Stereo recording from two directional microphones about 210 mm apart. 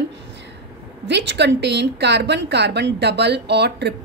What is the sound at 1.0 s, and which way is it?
A woman's voice, 55° right (ahead or behind).